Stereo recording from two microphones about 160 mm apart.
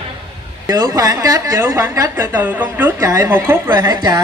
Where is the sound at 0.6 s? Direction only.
20° right (ahead or behind).